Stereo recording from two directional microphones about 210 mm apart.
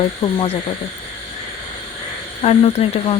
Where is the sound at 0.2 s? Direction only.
20° left (ahead or behind).